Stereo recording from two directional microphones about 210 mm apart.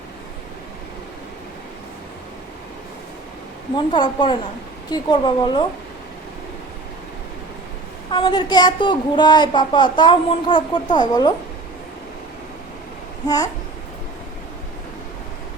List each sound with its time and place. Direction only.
3.9 s a woman's voice: 20° left (ahead or behind)
8.1 s a woman's voice: 20° left (ahead or behind)
13.2 s babbling: 15° left (ahead or behind)